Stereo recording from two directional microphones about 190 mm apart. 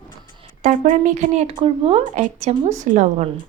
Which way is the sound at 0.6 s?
40° right (ahead or behind).